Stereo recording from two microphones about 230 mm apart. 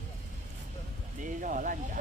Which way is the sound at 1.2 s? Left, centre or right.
Right.